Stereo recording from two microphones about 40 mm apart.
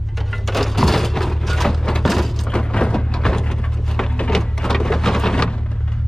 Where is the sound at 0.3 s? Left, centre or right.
Centre.